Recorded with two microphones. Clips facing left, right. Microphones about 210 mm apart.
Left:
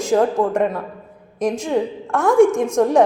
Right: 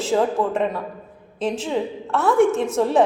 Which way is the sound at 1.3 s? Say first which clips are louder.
Left 4 dB; 10° left (ahead or behind).